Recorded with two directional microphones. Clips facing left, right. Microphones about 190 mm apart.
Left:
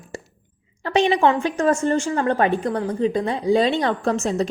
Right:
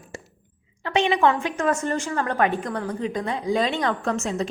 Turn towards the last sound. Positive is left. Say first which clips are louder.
# left 4 dB
turn(degrees=35)  # may be behind; listen again after turning